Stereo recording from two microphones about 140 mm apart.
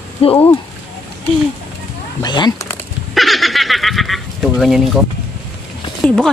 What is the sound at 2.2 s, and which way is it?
Speech, 30° left (ahead or behind).